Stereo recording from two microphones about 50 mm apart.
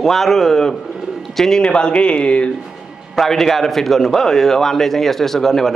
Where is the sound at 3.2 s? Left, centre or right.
Centre.